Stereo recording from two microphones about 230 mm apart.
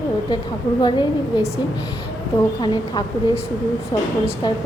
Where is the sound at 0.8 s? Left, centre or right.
Centre.